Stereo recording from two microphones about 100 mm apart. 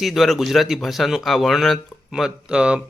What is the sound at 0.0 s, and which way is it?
Speech, centre (ahead or behind).